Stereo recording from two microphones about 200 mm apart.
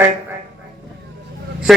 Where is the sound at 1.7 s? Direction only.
Centre (ahead or behind).